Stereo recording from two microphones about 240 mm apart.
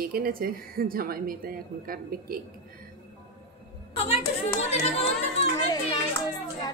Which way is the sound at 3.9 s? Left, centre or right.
Left.